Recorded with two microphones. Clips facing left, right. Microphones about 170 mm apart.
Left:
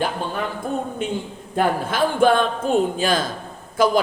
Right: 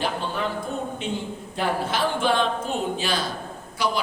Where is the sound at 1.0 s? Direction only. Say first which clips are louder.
Left 3 dB; 50° left (ahead or behind).